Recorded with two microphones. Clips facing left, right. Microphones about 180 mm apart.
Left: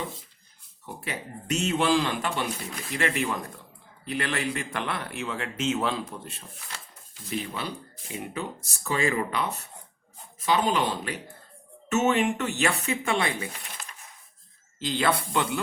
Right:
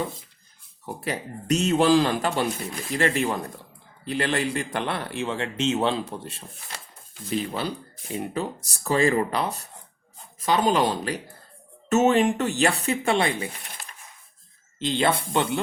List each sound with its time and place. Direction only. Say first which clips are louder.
0.9 s speech: right 5 dB; 40° right (ahead or behind)
14.8 s speech: right 3 dB; 25° right (ahead or behind)